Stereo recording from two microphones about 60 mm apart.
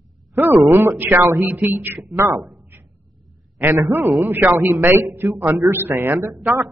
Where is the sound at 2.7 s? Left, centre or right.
Right.